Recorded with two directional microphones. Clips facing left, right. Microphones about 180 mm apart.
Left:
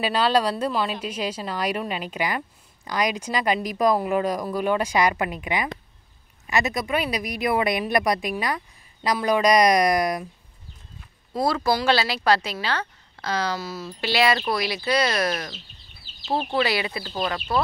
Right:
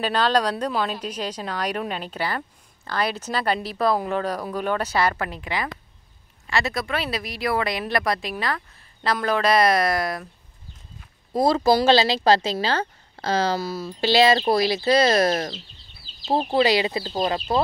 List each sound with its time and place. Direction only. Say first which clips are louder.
0.0 s a woman's voice: even; 10° left (ahead or behind)
11.4 s speech: right 4 dB; 25° right (ahead or behind)